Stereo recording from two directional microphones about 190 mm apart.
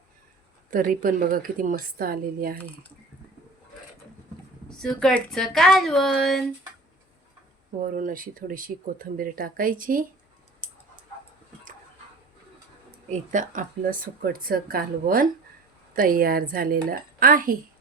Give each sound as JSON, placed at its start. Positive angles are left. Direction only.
{"t": 0.7, "sound": "speech", "side_deg": -50}
{"t": 4.8, "sound": "speech", "side_deg": 0}
{"t": 7.8, "sound": "speech", "side_deg": -45}
{"t": 13.1, "sound": "speech", "side_deg": -40}